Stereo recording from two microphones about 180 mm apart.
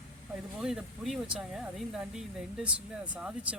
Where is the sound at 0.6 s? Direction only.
Centre (ahead or behind).